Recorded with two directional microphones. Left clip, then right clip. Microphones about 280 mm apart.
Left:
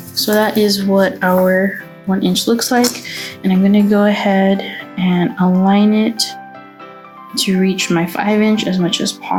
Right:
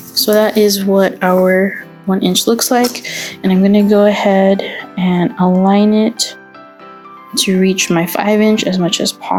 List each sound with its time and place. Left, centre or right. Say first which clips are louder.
0.2 s speech: right 3 dB; right
7.3 s speech: right 3 dB; right